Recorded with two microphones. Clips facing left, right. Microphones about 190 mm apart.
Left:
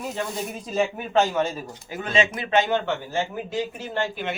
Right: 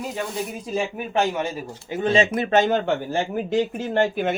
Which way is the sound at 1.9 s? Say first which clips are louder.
Right 4 dB; 30° right (ahead or behind).